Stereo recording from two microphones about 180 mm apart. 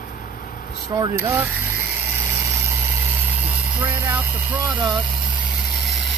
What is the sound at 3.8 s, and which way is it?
Speech, 10° right (ahead or behind).